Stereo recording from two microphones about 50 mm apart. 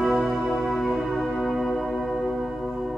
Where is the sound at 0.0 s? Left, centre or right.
Centre.